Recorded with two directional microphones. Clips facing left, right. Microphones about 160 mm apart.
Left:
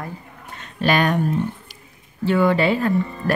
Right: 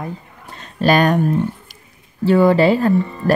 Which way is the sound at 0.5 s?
40° right (ahead or behind).